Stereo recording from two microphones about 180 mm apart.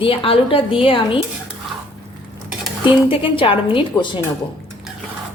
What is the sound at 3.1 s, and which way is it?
A woman's voice, 30° left (ahead or behind).